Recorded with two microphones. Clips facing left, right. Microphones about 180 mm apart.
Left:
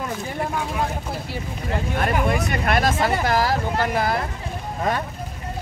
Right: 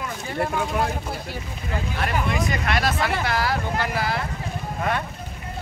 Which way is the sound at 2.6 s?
45° left (ahead or behind).